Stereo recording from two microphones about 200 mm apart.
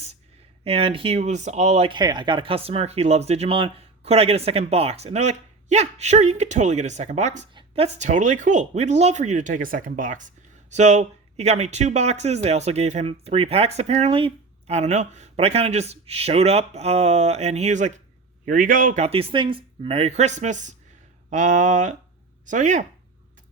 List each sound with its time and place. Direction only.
0.6 s speech: 30° right (ahead or behind)